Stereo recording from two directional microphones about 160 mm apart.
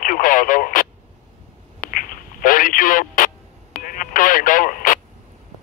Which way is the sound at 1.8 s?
60° left (ahead or behind).